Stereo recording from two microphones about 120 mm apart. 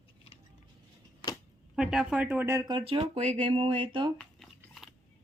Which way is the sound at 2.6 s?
40° right (ahead or behind).